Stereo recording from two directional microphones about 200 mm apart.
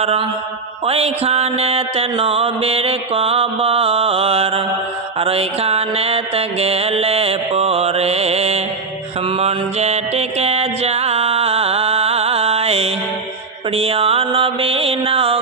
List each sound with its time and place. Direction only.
0.0 s mantra: 30° right (ahead or behind)